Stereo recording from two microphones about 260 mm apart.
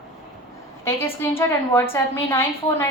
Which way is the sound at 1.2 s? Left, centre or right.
Centre.